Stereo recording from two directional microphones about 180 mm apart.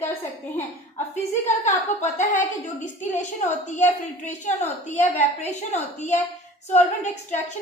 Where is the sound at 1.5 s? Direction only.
40° left (ahead or behind).